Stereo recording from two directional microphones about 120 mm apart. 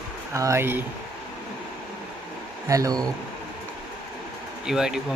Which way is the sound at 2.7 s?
30° right (ahead or behind).